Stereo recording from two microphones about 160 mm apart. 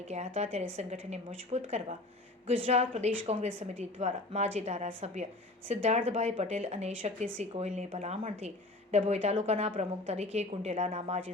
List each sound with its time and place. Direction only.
0.1 s a woman's voice: 45° right (ahead or behind)